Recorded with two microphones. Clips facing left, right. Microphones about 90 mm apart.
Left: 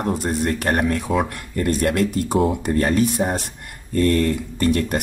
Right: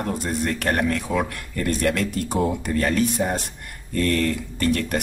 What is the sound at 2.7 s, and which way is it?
Speech, 25° left (ahead or behind).